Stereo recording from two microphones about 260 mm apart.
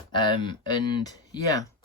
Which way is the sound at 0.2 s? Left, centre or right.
Centre.